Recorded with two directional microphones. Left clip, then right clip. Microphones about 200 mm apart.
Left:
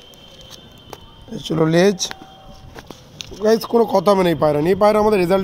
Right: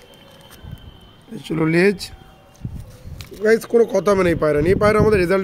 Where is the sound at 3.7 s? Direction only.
40° left (ahead or behind).